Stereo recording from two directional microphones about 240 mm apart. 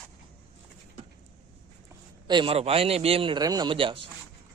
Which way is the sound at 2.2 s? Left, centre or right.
Centre.